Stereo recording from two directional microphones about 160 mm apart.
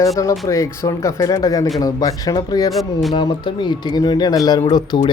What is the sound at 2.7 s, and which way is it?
Speech, centre (ahead or behind).